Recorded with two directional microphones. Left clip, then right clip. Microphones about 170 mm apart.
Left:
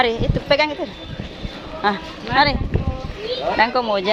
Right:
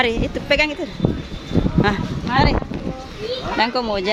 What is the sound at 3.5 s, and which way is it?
Speech, 20° right (ahead or behind).